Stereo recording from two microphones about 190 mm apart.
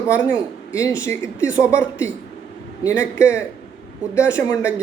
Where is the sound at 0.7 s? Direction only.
15° left (ahead or behind).